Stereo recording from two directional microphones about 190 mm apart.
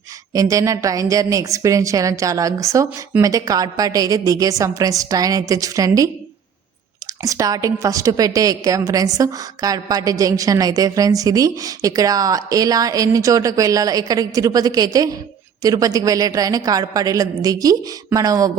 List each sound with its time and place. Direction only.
0.3 s a woman's voice: 15° right (ahead or behind)
7.2 s a woman's voice: 20° right (ahead or behind)